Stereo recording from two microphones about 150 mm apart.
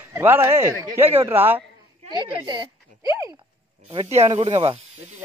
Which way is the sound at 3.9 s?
45° right (ahead or behind).